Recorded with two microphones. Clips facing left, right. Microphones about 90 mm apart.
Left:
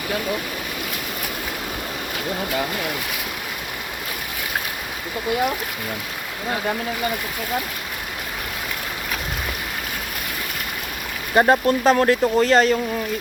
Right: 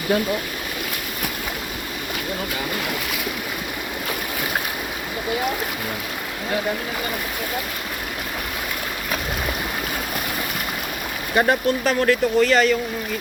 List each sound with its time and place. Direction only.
11.3 s speech: 30° left (ahead or behind)